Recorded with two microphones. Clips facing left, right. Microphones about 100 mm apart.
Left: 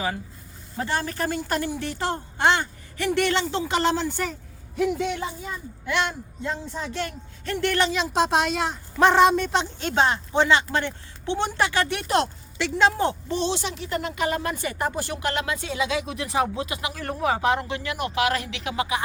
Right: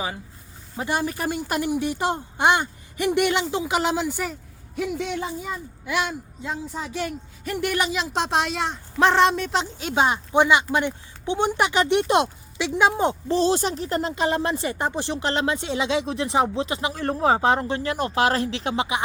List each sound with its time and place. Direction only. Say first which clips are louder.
0.8 s a man's voice: right 1 dB; 15° right (ahead or behind)
13.2 s speech: right 5 dB; 35° right (ahead or behind)